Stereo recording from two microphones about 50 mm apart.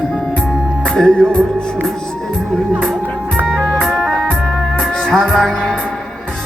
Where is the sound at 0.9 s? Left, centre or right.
Centre.